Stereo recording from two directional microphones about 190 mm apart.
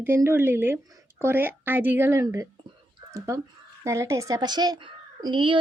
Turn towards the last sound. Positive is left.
turn(degrees=-25)  # may be behind; listen again after turning